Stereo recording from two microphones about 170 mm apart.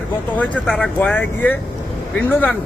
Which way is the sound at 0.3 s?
5° left (ahead or behind).